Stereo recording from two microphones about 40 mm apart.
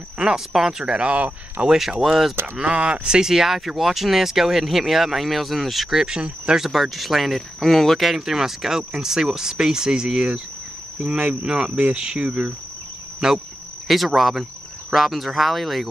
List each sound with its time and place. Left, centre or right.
0.2 s speech: centre
0.8 s speech: right
1.7 s speech: centre
2.6 s speech: right
3.3 s speech: centre
5.9 s speech: centre
6.7 s speech: centre
11.1 s speech: right
13.2 s speech: centre